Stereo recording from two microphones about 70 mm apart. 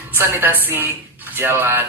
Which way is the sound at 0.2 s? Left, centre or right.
Right.